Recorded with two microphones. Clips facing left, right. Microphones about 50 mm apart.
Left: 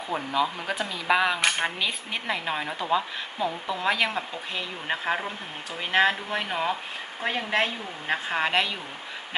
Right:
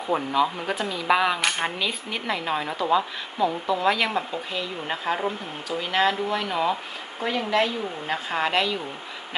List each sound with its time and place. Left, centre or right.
0.1 s a woman's voice: centre
7.2 s a woman's voice: left
8.3 s speech: centre